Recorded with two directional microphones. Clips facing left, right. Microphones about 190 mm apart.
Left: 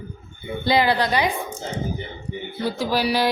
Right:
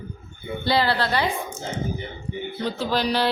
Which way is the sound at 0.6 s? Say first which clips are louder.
Left 3 dB; 15° left (ahead or behind).